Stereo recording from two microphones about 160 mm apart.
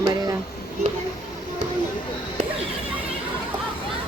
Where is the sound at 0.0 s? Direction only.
25° right (ahead or behind).